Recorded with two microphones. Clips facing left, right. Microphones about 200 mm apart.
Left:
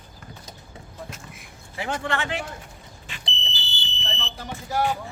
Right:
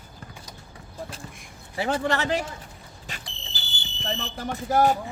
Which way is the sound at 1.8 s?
35° right (ahead or behind).